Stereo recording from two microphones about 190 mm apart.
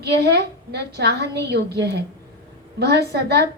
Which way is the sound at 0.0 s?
60° right (ahead or behind).